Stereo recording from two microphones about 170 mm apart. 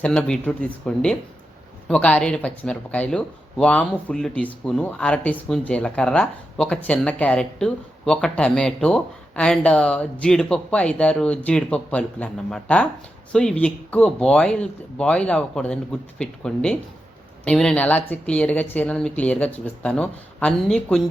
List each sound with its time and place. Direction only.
0.0 s speech: 5° left (ahead or behind)